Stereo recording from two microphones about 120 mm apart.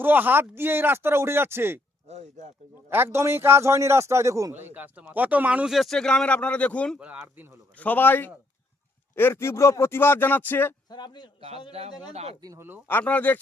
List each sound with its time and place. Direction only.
0.0 s speech: 15° right (ahead or behind)
2.0 s speech: 70° right (ahead or behind)
2.9 s a man's voice: 20° right (ahead or behind); by 7.0 s 10° left (ahead or behind)
7.0 s a man's voice: 15° right (ahead or behind)
7.8 s a man's voice: 15° left (ahead or behind)
10.8 s a man's voice: 40° left (ahead or behind)
11.3 s speech: 55° right (ahead or behind)
12.4 s speech: 30° right (ahead or behind)
12.9 s a man's voice: 15° left (ahead or behind)